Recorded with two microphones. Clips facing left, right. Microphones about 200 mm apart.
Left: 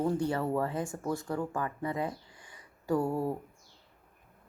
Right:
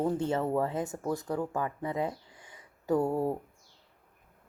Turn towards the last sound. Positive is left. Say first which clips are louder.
# right 2 dB
turn(degrees=-20)  # may be behind; listen again after turning